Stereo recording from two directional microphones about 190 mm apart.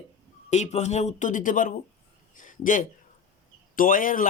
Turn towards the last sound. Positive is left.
turn(degrees=45)  # may be behind; listen again after turning